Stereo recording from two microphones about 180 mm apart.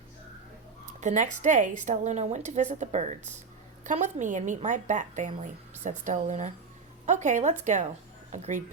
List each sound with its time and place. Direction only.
0.9 s a woman's voice: 45° right (ahead or behind)